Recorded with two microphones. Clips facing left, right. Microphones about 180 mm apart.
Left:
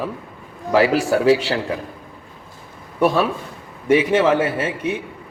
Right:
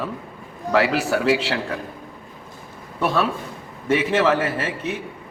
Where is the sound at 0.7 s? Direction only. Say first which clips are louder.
Left 3 dB; 30° left (ahead or behind).